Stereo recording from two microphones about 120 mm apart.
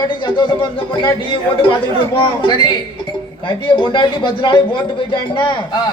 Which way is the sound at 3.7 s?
45° left (ahead or behind).